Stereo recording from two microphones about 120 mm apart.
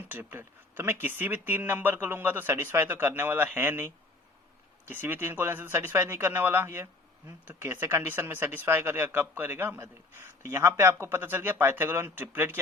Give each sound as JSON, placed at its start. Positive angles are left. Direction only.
{"t": 0.0, "sound": "speech", "side_deg": -15}